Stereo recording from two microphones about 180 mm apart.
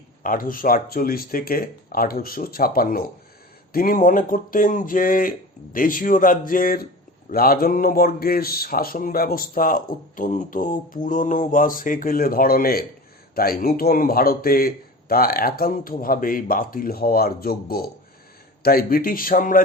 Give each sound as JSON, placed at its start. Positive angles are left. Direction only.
{"t": 0.2, "sound": "speech", "side_deg": 50}